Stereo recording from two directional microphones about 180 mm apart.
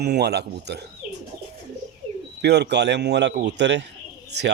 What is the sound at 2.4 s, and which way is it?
Speech, 70° right (ahead or behind).